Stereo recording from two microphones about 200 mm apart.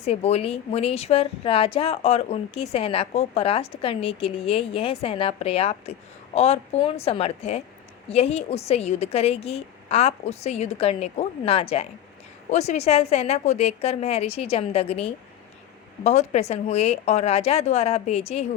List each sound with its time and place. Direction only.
0.0 s a woman's voice: 30° left (ahead or behind)